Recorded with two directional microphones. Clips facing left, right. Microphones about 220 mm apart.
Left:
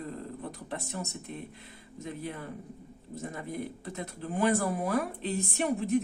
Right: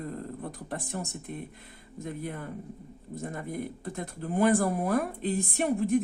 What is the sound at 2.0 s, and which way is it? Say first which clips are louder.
Speech: right 2 dB; 50° right (ahead or behind).